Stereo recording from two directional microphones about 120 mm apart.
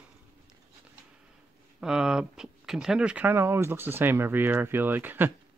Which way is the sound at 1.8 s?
5° right (ahead or behind).